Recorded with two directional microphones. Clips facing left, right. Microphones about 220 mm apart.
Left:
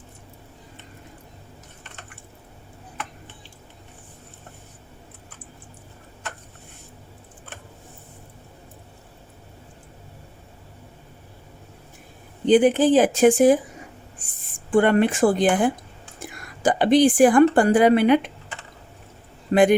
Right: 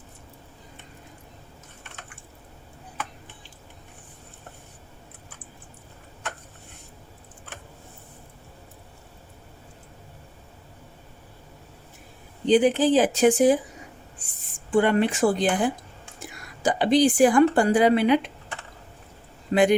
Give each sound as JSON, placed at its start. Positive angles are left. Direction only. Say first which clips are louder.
{"t": 12.5, "sound": "speech", "louder": "left 3 dB", "side_deg": 50}
{"t": 14.7, "sound": "a woman's voice", "louder": "left 3 dB", "side_deg": 55}
{"t": 19.5, "sound": "a man's voice", "louder": "left 3 dB", "side_deg": 55}